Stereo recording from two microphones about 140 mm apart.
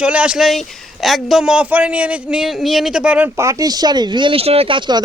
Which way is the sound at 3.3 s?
20° right (ahead or behind).